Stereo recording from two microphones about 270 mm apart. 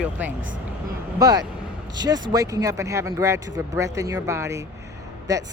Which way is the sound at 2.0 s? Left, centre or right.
Centre.